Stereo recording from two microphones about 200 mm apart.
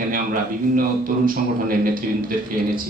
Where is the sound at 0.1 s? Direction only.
45° right (ahead or behind).